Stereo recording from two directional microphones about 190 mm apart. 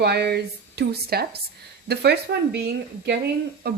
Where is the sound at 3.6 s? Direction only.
55° right (ahead or behind).